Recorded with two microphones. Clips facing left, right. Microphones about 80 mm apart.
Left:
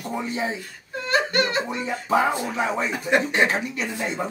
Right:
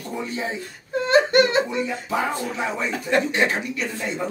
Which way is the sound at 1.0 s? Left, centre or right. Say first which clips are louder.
Right 6 dB; right.